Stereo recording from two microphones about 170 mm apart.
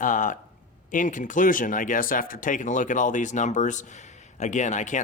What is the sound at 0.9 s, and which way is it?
Speech, 50° left (ahead or behind).